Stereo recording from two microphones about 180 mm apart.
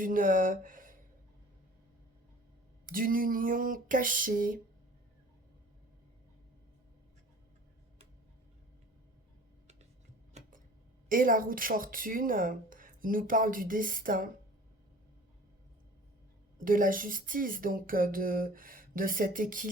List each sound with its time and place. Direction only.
0.0 s speech: 50° right (ahead or behind)
2.8 s a woman's voice: 50° right (ahead or behind)
11.1 s a woman's voice: 50° right (ahead or behind)
16.6 s a woman's voice: 50° right (ahead or behind)